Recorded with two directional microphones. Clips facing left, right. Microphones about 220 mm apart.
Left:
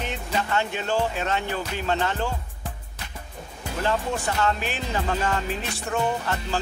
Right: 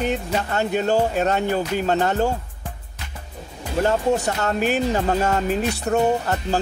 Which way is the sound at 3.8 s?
40° right (ahead or behind).